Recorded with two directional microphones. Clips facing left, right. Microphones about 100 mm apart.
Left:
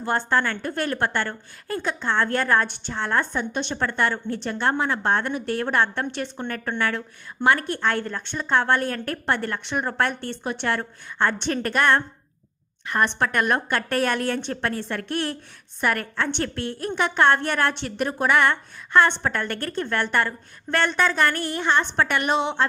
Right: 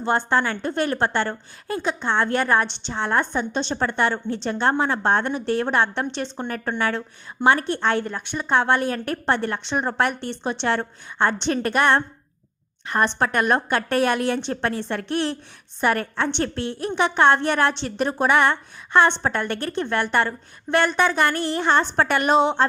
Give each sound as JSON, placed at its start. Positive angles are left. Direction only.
{"t": 0.0, "sound": "a woman's voice", "side_deg": -20}
{"t": 3.5, "sound": "a woman's voice", "side_deg": -30}
{"t": 21.6, "sound": "a woman's voice", "side_deg": -35}